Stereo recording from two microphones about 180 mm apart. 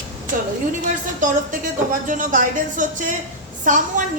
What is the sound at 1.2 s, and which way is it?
A woman's voice, 45° right (ahead or behind).